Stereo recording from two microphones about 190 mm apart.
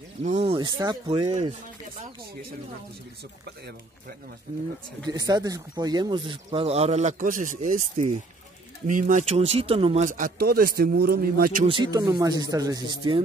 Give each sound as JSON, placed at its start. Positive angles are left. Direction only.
{"t": 0.2, "sound": "speech", "side_deg": -35}
{"t": 5.0, "sound": "speech", "side_deg": -20}
{"t": 10.0, "sound": "a man's voice", "side_deg": -45}
{"t": 11.6, "sound": "speech", "side_deg": -25}